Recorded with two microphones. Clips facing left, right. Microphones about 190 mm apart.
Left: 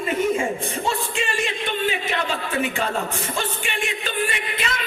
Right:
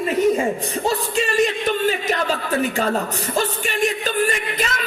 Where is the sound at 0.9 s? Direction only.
40° right (ahead or behind).